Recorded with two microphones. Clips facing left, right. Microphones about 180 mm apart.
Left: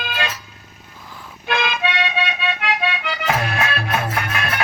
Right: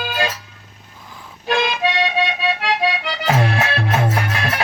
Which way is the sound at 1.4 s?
35° right (ahead or behind).